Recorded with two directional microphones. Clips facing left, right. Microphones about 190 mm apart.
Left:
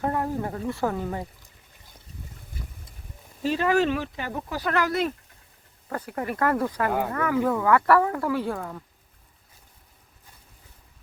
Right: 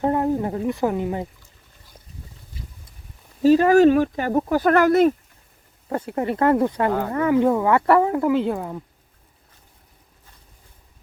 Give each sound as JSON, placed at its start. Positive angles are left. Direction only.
{"t": 0.0, "sound": "speech", "side_deg": -20}
{"t": 2.6, "sound": "boat", "side_deg": 55}
{"t": 3.4, "sound": "speech", "side_deg": -40}
{"t": 5.9, "sound": "speech", "side_deg": -25}